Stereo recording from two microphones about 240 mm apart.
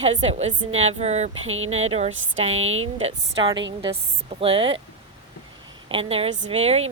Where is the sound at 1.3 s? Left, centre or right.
Right.